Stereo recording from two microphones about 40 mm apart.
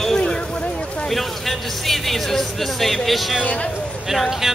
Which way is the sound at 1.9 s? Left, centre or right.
Centre.